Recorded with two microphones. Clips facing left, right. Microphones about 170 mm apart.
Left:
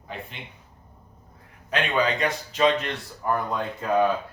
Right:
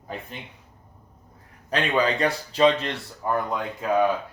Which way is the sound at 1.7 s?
35° right (ahead or behind).